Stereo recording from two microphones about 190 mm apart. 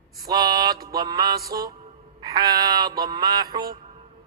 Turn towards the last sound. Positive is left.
turn(degrees=-20)  # may be behind; listen again after turning